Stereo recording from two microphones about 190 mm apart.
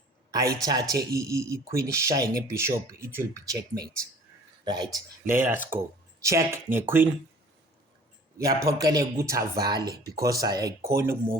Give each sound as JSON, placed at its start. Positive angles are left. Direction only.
{"t": 0.3, "sound": "a man's voice", "side_deg": -20}
{"t": 4.6, "sound": "speech", "side_deg": -20}
{"t": 8.4, "sound": "a man's voice", "side_deg": -20}